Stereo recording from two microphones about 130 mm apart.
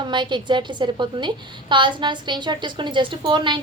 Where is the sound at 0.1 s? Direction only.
35° right (ahead or behind).